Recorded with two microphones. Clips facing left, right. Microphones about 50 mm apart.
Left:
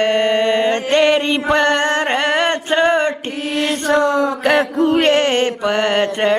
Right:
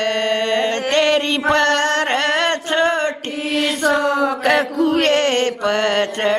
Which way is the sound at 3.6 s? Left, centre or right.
Left.